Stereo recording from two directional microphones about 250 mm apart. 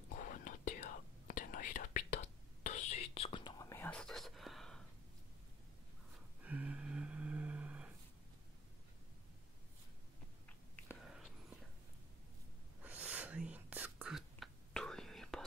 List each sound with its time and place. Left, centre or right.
0.1 s whispering: left; by 4.8 s centre
6.4 s a sound: centre
10.8 s whispering: centre
12.8 s whispering: centre